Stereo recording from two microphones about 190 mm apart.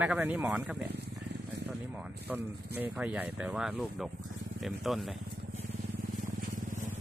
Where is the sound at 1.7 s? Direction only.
5° right (ahead or behind).